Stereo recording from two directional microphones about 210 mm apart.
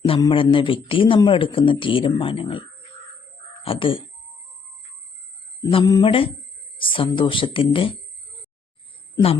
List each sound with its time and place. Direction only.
0.0 s a man's voice: 25° left (ahead or behind)
5.7 s a man's voice: 20° left (ahead or behind)